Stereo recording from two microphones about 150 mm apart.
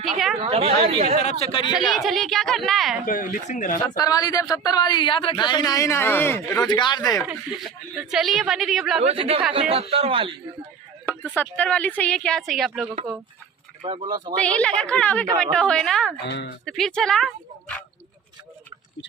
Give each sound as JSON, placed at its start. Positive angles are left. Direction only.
{"t": 0.0, "sound": "a sound", "side_deg": 0}
{"t": 0.4, "sound": "speech", "side_deg": -40}
{"t": 1.2, "sound": "speech", "side_deg": 45}
{"t": 1.7, "sound": "speech", "side_deg": 0}
{"t": 3.1, "sound": "speech", "side_deg": 60}
{"t": 3.8, "sound": "speech", "side_deg": 25}
{"t": 6.6, "sound": "speech", "side_deg": 30}
{"t": 7.9, "sound": "speech", "side_deg": 0}
{"t": 9.0, "sound": "speech", "side_deg": -40}
{"t": 11.2, "sound": "speech", "side_deg": 10}
{"t": 13.8, "sound": "speech", "side_deg": -35}
{"t": 14.4, "sound": "speech", "side_deg": 10}